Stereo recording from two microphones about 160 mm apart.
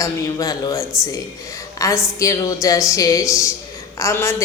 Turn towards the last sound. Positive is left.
turn(degrees=15)  # may be behind; listen again after turning